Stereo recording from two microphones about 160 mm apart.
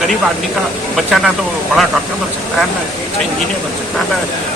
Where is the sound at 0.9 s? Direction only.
Centre (ahead or behind).